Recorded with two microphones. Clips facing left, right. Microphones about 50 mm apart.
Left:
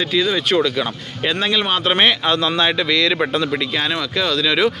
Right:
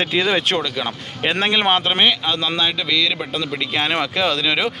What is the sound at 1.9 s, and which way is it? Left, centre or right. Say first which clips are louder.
Speech: left 2 dB; centre.